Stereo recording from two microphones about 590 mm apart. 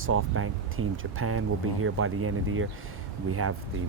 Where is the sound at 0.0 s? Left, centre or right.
Right.